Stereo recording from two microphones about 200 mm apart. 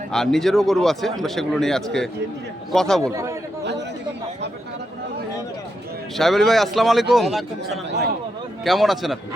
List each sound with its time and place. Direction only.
0.1 s speech: centre (ahead or behind)
3.0 s a man's voice: 15° right (ahead or behind)
3.6 s chatter: 60° right (ahead or behind)
6.1 s speech: centre (ahead or behind)